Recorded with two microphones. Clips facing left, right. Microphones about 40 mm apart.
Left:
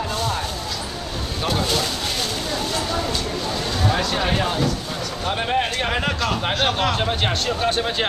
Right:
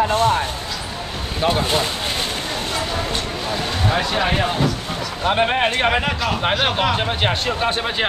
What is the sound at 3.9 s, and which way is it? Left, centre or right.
Speech, centre.